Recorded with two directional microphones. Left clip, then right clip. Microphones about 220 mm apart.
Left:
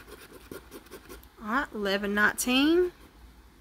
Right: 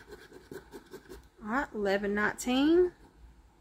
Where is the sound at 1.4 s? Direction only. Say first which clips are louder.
Left 2 dB; 15° left (ahead or behind).